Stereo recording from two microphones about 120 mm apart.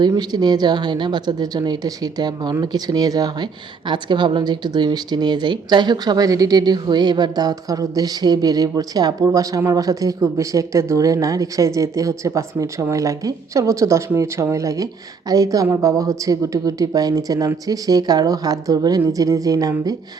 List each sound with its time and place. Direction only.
0.1 s a woman's voice: 35° right (ahead or behind)